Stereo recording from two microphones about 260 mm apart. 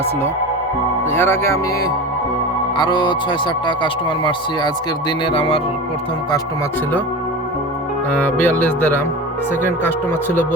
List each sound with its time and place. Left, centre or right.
1.1 s speech: centre
8.1 s speech: centre